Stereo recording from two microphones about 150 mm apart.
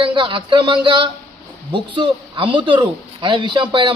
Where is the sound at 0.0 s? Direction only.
35° right (ahead or behind).